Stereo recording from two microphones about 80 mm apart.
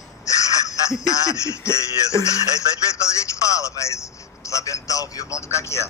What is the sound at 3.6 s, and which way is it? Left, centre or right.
A man's voice, left.